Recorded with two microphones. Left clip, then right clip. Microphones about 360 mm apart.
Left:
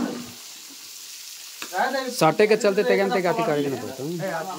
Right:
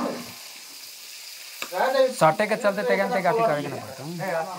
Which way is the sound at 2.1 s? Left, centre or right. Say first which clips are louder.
Left 2 dB; centre.